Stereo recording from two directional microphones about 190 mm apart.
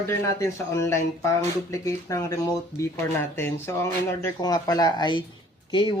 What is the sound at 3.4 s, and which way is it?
Speech, 10° left (ahead or behind).